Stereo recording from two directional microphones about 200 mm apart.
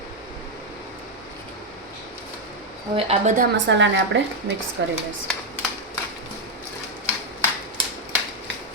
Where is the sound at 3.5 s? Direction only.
65° right (ahead or behind).